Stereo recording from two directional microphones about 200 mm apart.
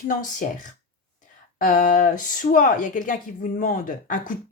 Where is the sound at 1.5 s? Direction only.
40° left (ahead or behind).